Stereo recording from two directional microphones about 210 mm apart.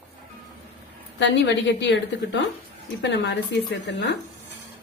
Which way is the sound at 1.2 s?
55° left (ahead or behind).